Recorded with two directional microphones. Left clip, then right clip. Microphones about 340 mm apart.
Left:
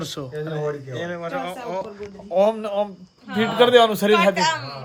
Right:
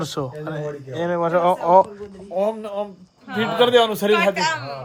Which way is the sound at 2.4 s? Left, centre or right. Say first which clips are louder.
Left 4 dB; centre.